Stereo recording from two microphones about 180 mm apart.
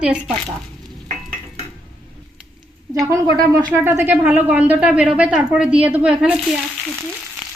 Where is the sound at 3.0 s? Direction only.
15° right (ahead or behind).